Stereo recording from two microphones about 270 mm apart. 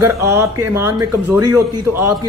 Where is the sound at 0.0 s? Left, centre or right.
Centre.